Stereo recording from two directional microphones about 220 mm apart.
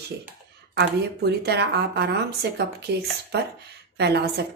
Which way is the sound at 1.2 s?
50° right (ahead or behind).